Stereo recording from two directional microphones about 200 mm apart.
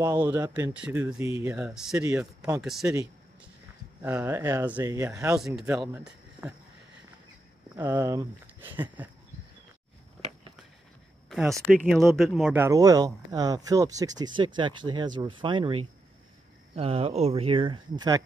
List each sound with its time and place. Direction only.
0.0 s speech: 10° right (ahead or behind)
2.0 s speech: 15° right (ahead or behind)
2.6 s speech: centre (ahead or behind)
4.0 s speech: 10° right (ahead or behind)
6.4 s speech: 5° right (ahead or behind)
7.7 s speech: 15° right (ahead or behind)
11.2 s a sound: centre (ahead or behind)
11.6 s speech: centre (ahead or behind); by 18.2 s 20° right (ahead or behind)